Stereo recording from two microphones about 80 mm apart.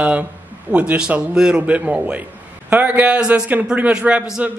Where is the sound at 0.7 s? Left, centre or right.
Centre.